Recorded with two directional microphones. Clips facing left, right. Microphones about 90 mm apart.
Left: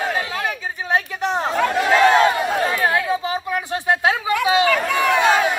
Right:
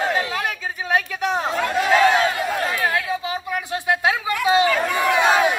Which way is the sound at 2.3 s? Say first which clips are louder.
Left 3 dB; 20° left (ahead or behind).